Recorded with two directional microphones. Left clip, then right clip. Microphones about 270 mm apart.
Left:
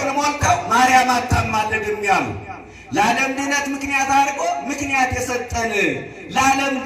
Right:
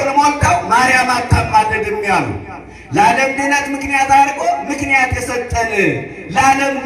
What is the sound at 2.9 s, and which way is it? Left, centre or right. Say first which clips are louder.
A man's voice: right 6 dB; left.